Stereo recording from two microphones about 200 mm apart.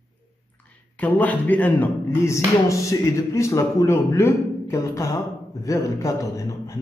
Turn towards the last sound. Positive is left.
turn(degrees=15)  # may be behind; listen again after turning